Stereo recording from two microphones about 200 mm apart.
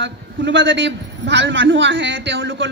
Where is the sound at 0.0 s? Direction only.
60° right (ahead or behind).